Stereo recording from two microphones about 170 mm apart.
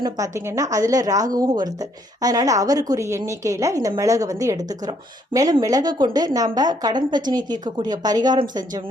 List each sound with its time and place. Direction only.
0.0 s a woman's voice: 15° right (ahead or behind)